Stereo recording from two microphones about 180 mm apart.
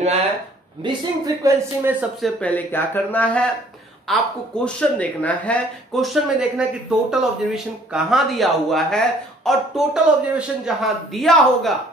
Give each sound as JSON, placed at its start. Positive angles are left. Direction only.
{"t": 0.8, "sound": "speech", "side_deg": -20}
{"t": 2.2, "sound": "speech", "side_deg": 10}
{"t": 6.5, "sound": "speech", "side_deg": -5}